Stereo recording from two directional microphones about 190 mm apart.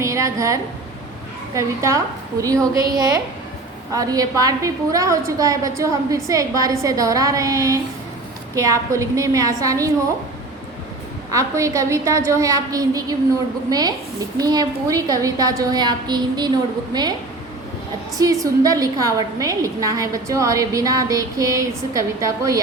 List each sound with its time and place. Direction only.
0.0 s a sound: 15° right (ahead or behind)
1.5 s a woman's voice: 15° right (ahead or behind)
11.3 s a woman's voice: 15° right (ahead or behind)
18.2 s a woman's voice: 20° right (ahead or behind)